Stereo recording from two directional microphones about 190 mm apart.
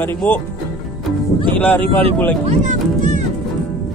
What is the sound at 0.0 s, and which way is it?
Speech, 10° left (ahead or behind).